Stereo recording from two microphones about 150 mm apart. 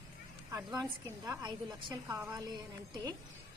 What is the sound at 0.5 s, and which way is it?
A woman's voice, 25° right (ahead or behind).